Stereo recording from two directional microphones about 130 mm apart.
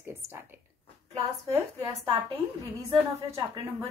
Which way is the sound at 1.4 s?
25° right (ahead or behind).